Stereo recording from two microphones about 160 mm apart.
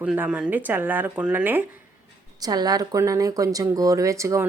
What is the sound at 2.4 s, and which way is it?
A woman's voice, 25° right (ahead or behind).